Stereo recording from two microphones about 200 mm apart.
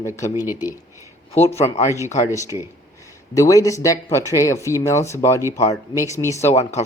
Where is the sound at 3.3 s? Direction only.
15° left (ahead or behind).